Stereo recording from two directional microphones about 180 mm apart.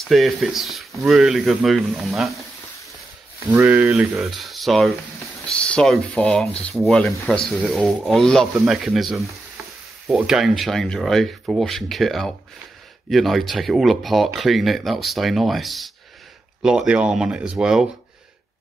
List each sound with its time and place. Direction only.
0.0 s speech: centre (ahead or behind)
3.5 s speech: 10° right (ahead or behind)